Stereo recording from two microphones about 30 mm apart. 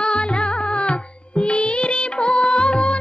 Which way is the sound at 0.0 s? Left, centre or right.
Left.